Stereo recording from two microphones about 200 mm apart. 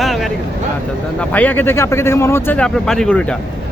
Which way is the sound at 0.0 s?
Centre (ahead or behind).